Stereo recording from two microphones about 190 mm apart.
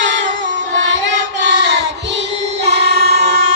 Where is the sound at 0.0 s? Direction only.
70° right (ahead or behind).